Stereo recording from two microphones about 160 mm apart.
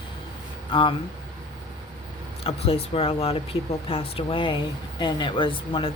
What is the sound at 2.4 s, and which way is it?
Speech, 35° left (ahead or behind).